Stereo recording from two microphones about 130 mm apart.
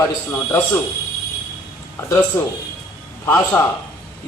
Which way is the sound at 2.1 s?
20° left (ahead or behind).